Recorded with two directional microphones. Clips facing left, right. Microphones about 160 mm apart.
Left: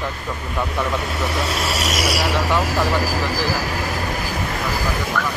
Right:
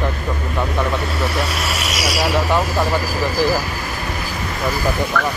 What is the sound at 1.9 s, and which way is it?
Speech, 50° left (ahead or behind).